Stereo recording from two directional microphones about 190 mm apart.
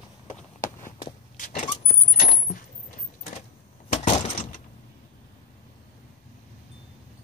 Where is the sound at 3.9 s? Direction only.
35° left (ahead or behind).